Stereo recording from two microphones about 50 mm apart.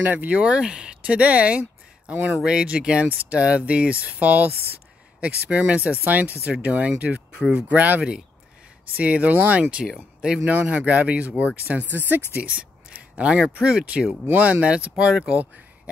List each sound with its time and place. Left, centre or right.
0.0 s speech: right
0.3 s speech: right
11.7 s speech: right
13.1 s speech: right